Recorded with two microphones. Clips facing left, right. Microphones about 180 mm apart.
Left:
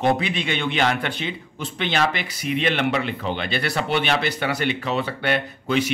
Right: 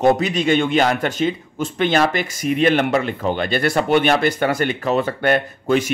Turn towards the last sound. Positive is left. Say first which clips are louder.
# right 4 dB
turn(degrees=-45)  # may be behind; listen again after turning